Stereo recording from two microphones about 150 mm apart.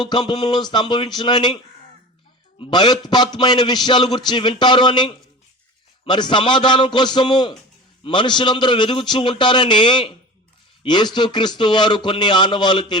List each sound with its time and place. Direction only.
0.0 s a man's voice: 30° left (ahead or behind)
2.6 s a man's voice: 30° left (ahead or behind)